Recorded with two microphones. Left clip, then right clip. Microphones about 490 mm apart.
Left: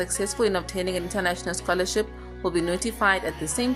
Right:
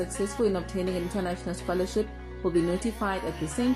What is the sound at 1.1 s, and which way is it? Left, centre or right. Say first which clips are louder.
Speech: left 6 dB; left.